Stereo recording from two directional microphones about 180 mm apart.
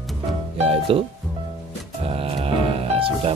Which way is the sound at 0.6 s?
30° right (ahead or behind).